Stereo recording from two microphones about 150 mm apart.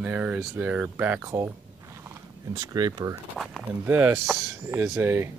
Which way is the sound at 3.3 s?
Centre (ahead or behind).